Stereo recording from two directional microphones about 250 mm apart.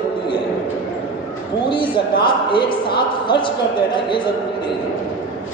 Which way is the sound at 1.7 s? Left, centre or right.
Centre.